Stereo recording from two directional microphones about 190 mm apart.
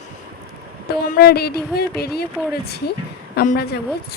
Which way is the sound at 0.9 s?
50° left (ahead or behind).